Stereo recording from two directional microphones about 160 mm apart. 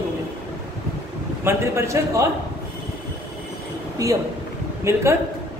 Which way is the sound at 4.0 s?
20° right (ahead or behind).